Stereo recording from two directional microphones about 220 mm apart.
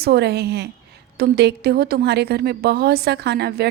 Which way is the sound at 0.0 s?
45° right (ahead or behind).